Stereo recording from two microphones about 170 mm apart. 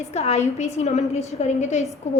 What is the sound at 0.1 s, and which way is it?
A woman's voice, 40° left (ahead or behind).